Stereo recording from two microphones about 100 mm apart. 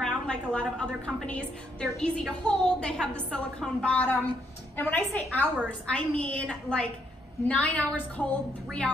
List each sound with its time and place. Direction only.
0.0 s a woman's voice: 10° left (ahead or behind)